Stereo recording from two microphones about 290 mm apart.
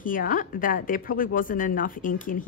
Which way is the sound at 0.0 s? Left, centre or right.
Left.